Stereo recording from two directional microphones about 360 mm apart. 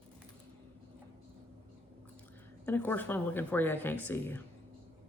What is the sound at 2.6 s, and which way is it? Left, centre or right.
Speech, centre.